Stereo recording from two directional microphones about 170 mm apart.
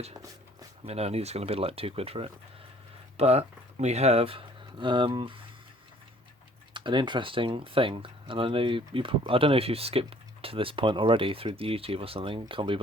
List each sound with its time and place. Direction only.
0.9 s speech: 35° right (ahead or behind)
6.7 s speech: 25° right (ahead or behind)